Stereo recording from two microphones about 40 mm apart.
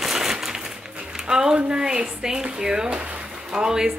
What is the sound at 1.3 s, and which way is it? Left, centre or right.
Speech, centre.